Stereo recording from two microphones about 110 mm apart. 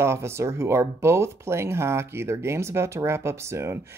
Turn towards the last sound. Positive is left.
turn(degrees=-25)  # may be behind; listen again after turning